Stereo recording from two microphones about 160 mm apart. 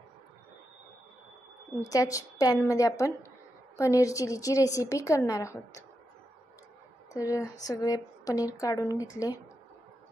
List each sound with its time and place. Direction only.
1.9 s speech: 20° left (ahead or behind)
7.2 s speech: 20° left (ahead or behind)